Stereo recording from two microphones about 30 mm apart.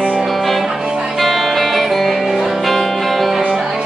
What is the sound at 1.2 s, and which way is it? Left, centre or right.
Music, centre.